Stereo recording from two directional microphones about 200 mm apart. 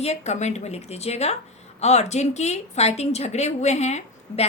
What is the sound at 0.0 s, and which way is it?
A woman's voice, 35° left (ahead or behind).